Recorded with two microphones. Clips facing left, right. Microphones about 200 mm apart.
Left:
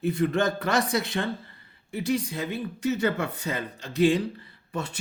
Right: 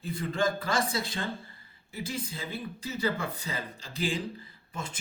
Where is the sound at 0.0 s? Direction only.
70° left (ahead or behind).